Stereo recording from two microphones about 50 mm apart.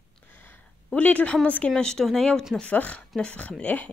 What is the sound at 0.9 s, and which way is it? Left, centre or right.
Speech, left.